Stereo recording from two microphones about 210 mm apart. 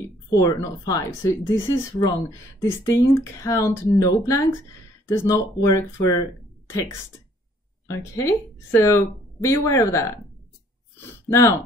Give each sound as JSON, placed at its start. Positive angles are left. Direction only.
{"t": 0.3, "sound": "speech", "side_deg": 15}
{"t": 7.9, "sound": "speech", "side_deg": 15}
{"t": 11.2, "sound": "speech", "side_deg": 15}